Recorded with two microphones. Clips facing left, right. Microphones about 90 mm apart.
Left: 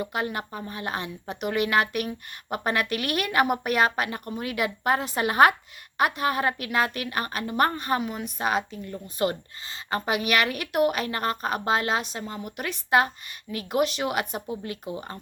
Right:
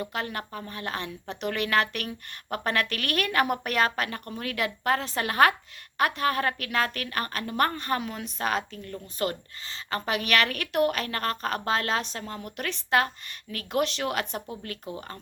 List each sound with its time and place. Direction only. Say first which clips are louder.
0.0 s speech: left 3 dB; 15° left (ahead or behind)